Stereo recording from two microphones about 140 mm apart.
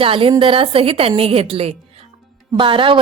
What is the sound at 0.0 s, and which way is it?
A woman's voice, 40° right (ahead or behind).